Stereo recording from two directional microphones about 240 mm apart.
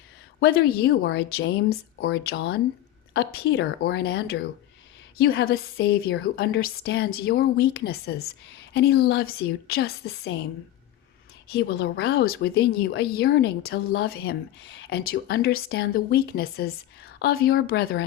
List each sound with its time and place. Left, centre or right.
0.3 s a woman's voice: left
11.5 s a woman's voice: left